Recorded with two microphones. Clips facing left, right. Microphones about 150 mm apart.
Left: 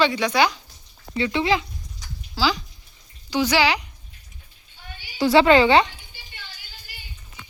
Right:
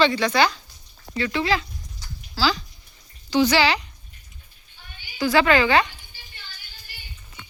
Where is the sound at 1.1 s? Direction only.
25° left (ahead or behind).